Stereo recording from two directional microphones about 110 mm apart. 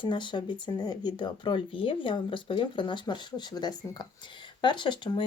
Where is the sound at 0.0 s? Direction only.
45° left (ahead or behind).